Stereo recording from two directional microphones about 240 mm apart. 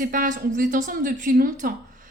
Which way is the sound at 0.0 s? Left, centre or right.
Right.